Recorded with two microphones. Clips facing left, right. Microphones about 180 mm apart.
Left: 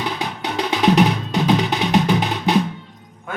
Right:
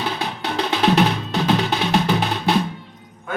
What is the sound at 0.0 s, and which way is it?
Music, 15° left (ahead or behind).